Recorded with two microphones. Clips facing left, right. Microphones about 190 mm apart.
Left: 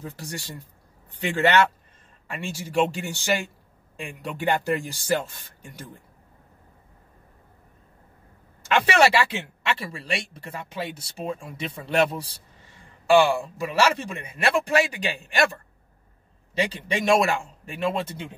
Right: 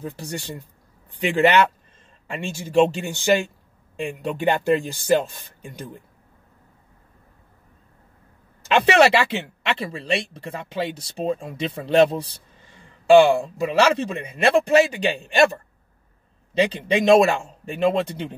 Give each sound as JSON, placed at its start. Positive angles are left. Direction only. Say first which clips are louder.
{"t": 0.0, "sound": "speech", "louder": "right 5 dB", "side_deg": -20}
{"t": 8.6, "sound": "speech", "louder": "right 4 dB", "side_deg": -20}